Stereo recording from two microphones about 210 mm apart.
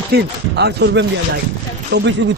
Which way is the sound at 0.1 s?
50° right (ahead or behind).